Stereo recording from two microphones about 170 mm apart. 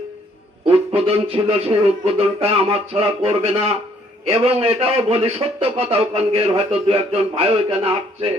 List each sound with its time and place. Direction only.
0.6 s a man's voice: 35° right (ahead or behind)